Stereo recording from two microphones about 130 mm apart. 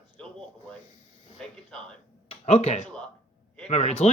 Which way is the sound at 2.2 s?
55° left (ahead or behind).